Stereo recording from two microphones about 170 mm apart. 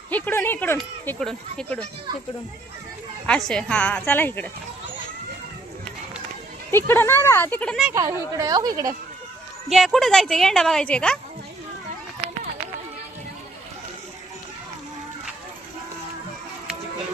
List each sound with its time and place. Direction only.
0.1 s speech: 10° left (ahead or behind)
3.2 s speech: 5° left (ahead or behind)
6.7 s speech: 15° left (ahead or behind)
7.9 s a woman's voice: 20° right (ahead or behind)
9.6 s speech: centre (ahead or behind)